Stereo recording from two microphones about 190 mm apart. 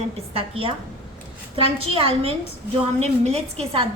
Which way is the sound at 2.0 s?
30° right (ahead or behind).